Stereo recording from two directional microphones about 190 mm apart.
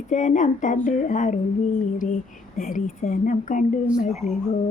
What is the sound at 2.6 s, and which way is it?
Speech, 45° left (ahead or behind).